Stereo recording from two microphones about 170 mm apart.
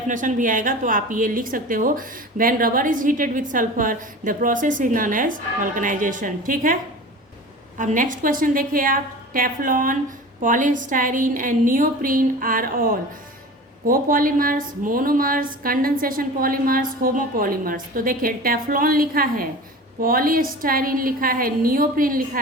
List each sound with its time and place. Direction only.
0.1 s a woman's voice: 50° right (ahead or behind)
7.8 s a woman's voice: 50° right (ahead or behind)